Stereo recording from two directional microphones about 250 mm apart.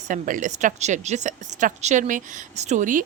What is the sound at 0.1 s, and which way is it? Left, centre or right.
A woman's voice, right.